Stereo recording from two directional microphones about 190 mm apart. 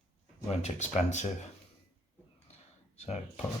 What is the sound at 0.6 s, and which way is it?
Speech, 40° left (ahead or behind).